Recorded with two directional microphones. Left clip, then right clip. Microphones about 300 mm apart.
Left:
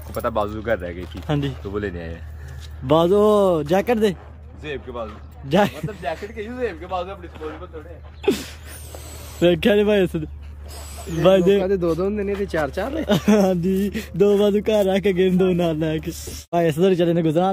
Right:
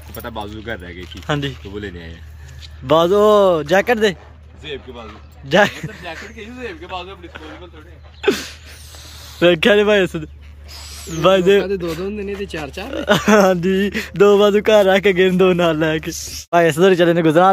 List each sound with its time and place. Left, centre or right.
0.1 s speech: centre
0.9 s speech: left
1.2 s speech: centre
1.6 s speech: left
2.9 s speech: centre
5.5 s speech: centre
9.4 s speech: centre
10.7 s owl: left
11.1 s speech: centre
16.1 s speech: left
16.4 s speech: centre